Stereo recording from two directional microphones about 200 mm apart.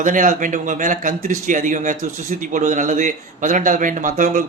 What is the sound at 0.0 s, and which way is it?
Speech, 40° right (ahead or behind).